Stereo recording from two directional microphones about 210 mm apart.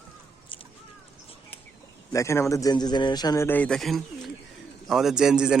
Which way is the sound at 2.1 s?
15° left (ahead or behind).